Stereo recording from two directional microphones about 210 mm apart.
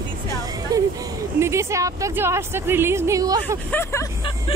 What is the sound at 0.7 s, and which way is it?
Speech, 15° right (ahead or behind).